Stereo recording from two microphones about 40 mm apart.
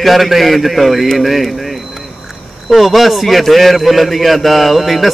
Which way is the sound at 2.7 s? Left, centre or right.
Centre.